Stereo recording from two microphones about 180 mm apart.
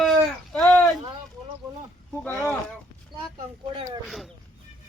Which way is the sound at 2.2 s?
10° left (ahead or behind).